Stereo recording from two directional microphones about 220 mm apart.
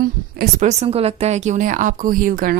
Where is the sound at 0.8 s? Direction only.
25° right (ahead or behind).